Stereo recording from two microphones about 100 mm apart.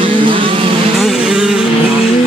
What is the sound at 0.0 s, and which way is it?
Vehicle, 60° right (ahead or behind).